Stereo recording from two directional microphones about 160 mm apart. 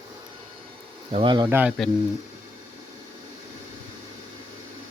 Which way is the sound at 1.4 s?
10° right (ahead or behind).